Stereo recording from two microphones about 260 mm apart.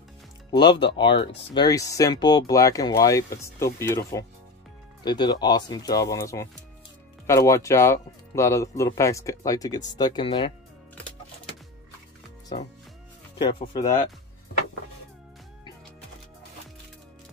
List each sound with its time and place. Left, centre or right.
0.5 s speech: centre
13.4 s speech: centre